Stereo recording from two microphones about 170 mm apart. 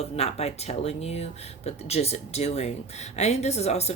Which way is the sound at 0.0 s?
40° left (ahead or behind).